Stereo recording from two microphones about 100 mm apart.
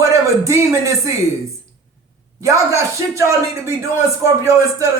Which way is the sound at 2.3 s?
30° right (ahead or behind).